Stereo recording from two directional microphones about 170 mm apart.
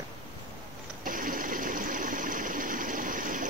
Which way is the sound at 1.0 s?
55° right (ahead or behind).